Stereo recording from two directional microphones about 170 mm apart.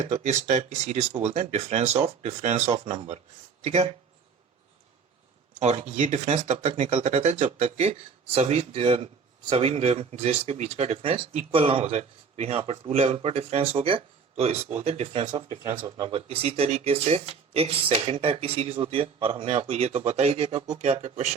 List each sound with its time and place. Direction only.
0.0 s speech: 45° right (ahead or behind)
5.5 s speech: 40° right (ahead or behind)